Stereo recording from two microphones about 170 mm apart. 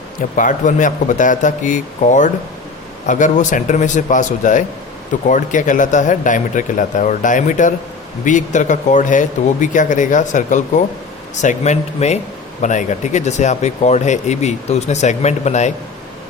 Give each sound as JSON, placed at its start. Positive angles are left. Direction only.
{"t": 0.3, "sound": "speech", "side_deg": 50}